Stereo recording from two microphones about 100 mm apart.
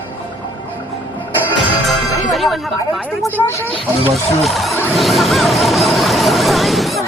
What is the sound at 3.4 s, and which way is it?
Speech, 25° left (ahead or behind).